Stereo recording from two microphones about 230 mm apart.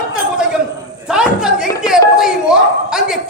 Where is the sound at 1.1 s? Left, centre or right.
Centre.